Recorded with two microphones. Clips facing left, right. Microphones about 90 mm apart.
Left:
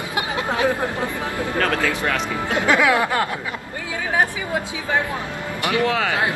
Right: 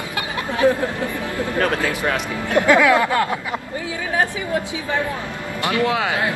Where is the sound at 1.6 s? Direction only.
20° right (ahead or behind).